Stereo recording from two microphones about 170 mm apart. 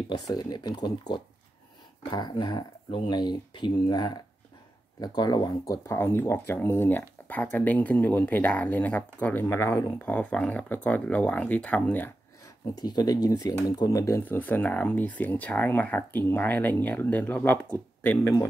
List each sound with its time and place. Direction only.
0.1 s speech: 25° left (ahead or behind)
2.0 s speech: 25° left (ahead or behind); by 12.5 s 10° left (ahead or behind)
12.7 s speech: 25° left (ahead or behind)